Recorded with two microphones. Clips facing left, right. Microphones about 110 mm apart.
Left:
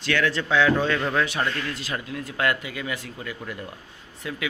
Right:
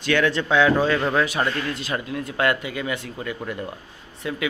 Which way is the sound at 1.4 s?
25° right (ahead or behind).